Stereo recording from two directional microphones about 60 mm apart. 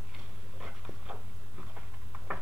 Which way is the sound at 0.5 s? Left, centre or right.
Centre.